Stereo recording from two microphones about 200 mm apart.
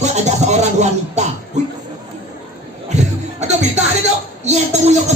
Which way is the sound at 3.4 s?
35° right (ahead or behind).